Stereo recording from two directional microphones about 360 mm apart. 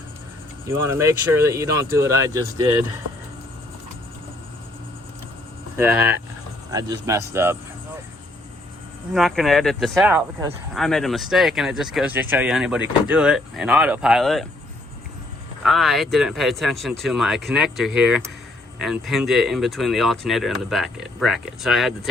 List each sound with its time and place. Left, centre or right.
0.9 s speech: centre
5.7 s speech: centre
9.1 s speech: centre
15.6 s speech: centre